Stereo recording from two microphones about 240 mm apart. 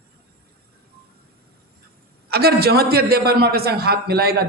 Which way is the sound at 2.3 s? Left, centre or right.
Right.